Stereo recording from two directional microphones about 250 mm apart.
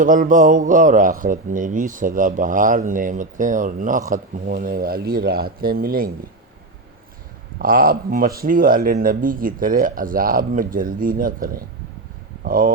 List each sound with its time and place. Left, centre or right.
0.0 s speech: right
7.6 s speech: right